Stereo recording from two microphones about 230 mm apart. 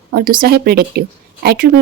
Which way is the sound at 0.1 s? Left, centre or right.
Right.